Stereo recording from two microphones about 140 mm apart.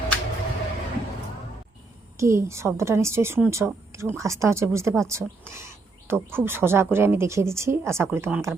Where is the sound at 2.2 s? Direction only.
20° right (ahead or behind).